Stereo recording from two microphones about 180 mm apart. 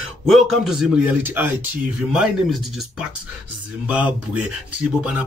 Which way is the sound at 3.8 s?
5° right (ahead or behind).